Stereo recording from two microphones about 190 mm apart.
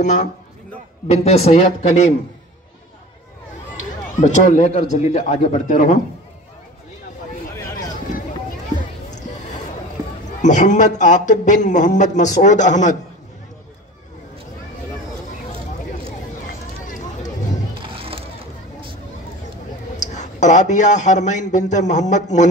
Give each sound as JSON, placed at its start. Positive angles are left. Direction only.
{"t": 0.0, "sound": "speech", "side_deg": 40}
{"t": 3.7, "sound": "run", "side_deg": 40}
{"t": 4.9, "sound": "speech", "side_deg": 35}
{"t": 10.4, "sound": "speech", "side_deg": 40}
{"t": 17.9, "sound": "a sound", "side_deg": -30}
{"t": 20.0, "sound": "speech", "side_deg": 40}